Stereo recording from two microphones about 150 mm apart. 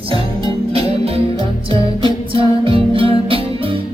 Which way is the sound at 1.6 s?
35° right (ahead or behind).